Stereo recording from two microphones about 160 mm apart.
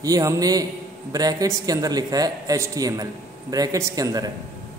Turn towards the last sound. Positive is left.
turn(degrees=-20)  # may be behind; listen again after turning